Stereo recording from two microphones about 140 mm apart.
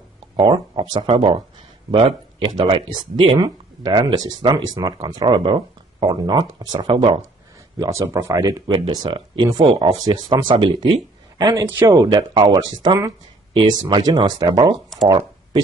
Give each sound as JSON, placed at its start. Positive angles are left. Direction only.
{"t": 0.4, "sound": "speech", "side_deg": -35}
{"t": 7.8, "sound": "speech", "side_deg": -20}
{"t": 15.0, "sound": "a sound", "side_deg": -25}